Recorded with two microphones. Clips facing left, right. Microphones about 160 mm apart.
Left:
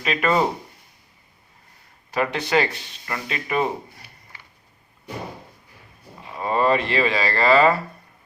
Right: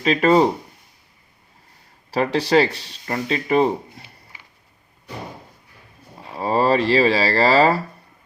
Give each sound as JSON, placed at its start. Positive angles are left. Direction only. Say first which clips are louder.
{"t": 0.0, "sound": "speech", "louder": "right 6 dB", "side_deg": -35}
{"t": 2.0, "sound": "speech", "louder": "right 4 dB", "side_deg": -35}
{"t": 6.3, "sound": "speech", "louder": "right 2 dB", "side_deg": -30}